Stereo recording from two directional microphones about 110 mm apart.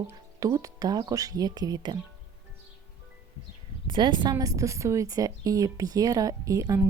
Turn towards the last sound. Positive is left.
turn(degrees=-30)  # may be behind; listen again after turning